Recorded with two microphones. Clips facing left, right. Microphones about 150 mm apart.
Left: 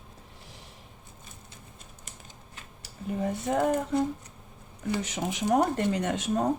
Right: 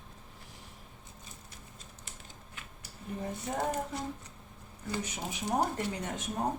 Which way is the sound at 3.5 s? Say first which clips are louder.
Left 9 dB; 55° left (ahead or behind).